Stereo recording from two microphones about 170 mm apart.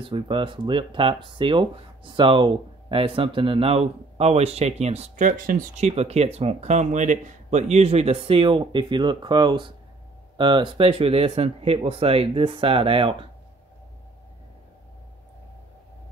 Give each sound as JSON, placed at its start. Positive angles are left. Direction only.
{"t": 0.0, "sound": "speech", "side_deg": -30}